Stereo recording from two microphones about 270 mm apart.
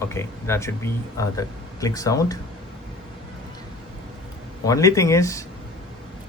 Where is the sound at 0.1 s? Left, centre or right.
Centre.